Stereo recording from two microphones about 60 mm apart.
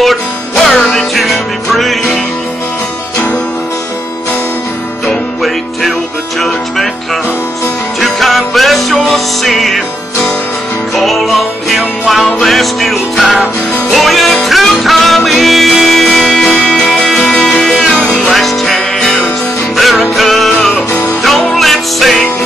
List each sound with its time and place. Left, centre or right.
0.0 s music: centre
5.0 s music: centre
8.0 s music: centre
11.0 s music: centre
20.9 s music: left
21.2 s music: centre